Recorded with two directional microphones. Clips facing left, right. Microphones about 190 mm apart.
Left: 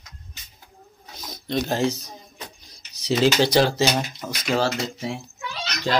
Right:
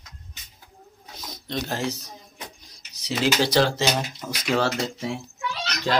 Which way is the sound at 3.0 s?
30° left (ahead or behind).